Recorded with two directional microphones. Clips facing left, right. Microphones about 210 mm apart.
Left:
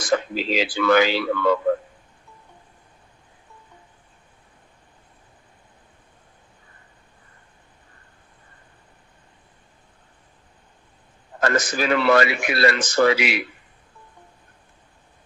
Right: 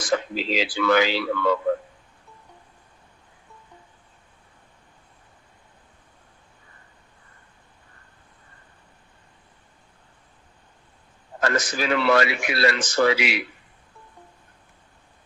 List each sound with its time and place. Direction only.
0.0 s speech: 50° left (ahead or behind)
11.3 s speech: 50° left (ahead or behind)